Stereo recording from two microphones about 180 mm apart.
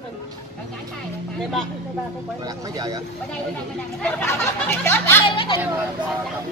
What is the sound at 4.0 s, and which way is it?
Speech, 10° left (ahead or behind).